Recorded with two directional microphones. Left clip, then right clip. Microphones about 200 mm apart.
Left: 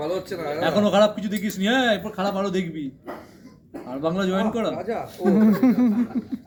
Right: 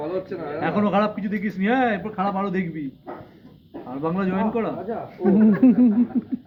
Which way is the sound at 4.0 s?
20° left (ahead or behind).